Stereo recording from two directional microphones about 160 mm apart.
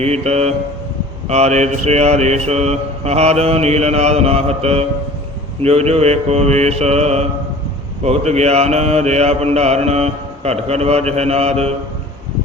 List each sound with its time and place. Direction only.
0.0 s mantra: 40° right (ahead or behind)